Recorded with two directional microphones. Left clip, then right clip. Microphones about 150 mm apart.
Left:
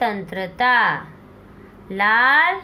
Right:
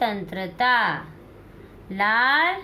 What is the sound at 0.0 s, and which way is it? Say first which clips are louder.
A woman's voice: left 3 dB; 40° left (ahead or behind).